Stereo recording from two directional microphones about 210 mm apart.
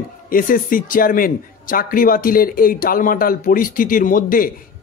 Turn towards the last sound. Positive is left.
turn(degrees=40)  # may be behind; listen again after turning